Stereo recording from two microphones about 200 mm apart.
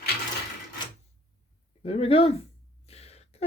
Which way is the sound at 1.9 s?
30° left (ahead or behind).